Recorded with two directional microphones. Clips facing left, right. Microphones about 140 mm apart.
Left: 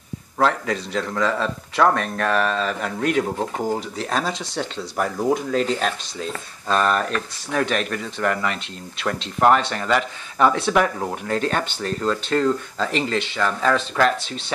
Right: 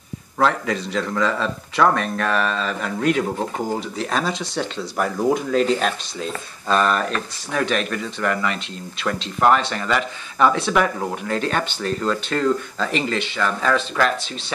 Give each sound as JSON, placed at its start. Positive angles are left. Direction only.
{"t": 0.4, "sound": "speech", "side_deg": 40}
{"t": 12.0, "sound": "speech", "side_deg": 30}